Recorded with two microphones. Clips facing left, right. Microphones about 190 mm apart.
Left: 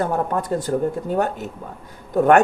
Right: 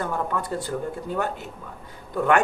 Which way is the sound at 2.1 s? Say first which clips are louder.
Left 6 dB; 45° left (ahead or behind).